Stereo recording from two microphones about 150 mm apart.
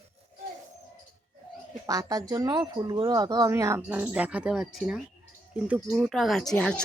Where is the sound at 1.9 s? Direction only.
25° right (ahead or behind).